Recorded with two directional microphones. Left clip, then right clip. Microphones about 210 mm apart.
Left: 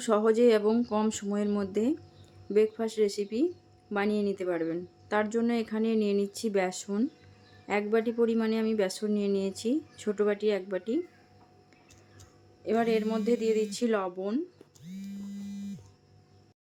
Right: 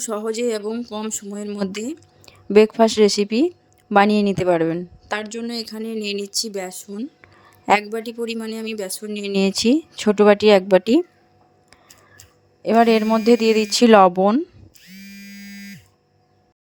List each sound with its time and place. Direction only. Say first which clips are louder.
0.0 s speech: even; centre (ahead or behind)
1.5 s speech: right 3 dB; 40° right (ahead or behind)
5.5 s speech: right 1 dB; centre (ahead or behind)
6.1 s speech: right 5 dB; 45° right (ahead or behind)
6.5 s speech: even; centre (ahead or behind)
9.1 s speech: right 9 dB; 45° right (ahead or behind)
12.6 s speech: right 12 dB; 45° right (ahead or behind)